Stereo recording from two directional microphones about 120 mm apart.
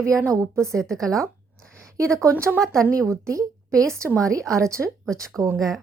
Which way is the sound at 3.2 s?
25° right (ahead or behind).